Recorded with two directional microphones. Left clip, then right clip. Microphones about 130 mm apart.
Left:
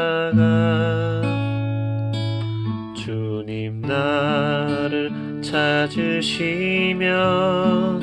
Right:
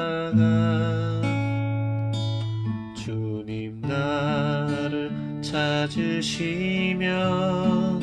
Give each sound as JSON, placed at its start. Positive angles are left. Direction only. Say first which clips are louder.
{"t": 0.0, "sound": "music", "louder": "left 6 dB", "side_deg": -45}
{"t": 3.9, "sound": "mantra", "louder": "left 6 dB", "side_deg": -50}
{"t": 5.5, "sound": "music", "louder": "left 6 dB", "side_deg": -55}
{"t": 6.4, "sound": "music", "louder": "left 6 dB", "side_deg": -40}